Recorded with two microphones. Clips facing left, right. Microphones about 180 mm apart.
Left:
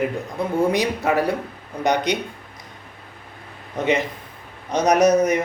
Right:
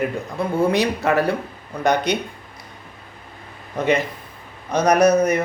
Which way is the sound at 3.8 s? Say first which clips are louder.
Right 1 dB; 20° left (ahead or behind).